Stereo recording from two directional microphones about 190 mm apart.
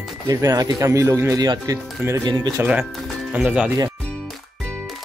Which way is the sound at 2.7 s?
5° right (ahead or behind).